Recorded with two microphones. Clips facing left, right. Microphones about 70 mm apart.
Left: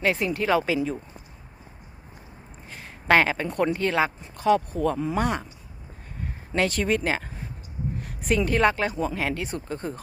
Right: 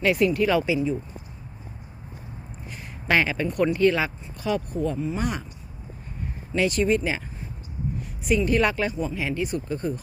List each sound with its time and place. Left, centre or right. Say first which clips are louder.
0.0 s speech: right 4 dB; left
3.1 s speech: left 2 dB; left
4.8 s speech: left 2 dB; left
5.2 s speech: left 2 dB; left
6.5 s speech: right 2 dB; left
8.9 s speech: left 1 dB; left